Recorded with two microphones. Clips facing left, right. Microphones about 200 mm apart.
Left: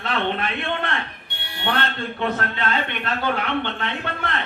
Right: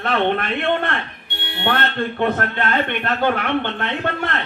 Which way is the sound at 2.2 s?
55° right (ahead or behind).